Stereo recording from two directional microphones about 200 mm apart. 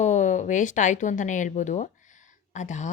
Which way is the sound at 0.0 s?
35° left (ahead or behind).